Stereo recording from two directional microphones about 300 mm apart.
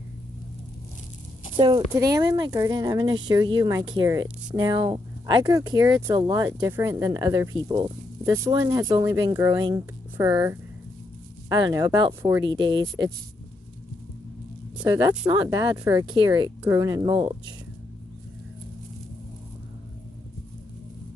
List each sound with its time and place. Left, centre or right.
1.5 s speech: centre
14.8 s speech: centre